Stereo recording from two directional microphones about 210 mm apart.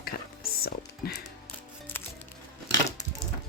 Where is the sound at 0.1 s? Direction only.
45° left (ahead or behind).